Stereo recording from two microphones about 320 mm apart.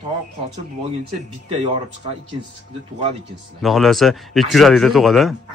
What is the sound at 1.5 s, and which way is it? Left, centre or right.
Speech, centre.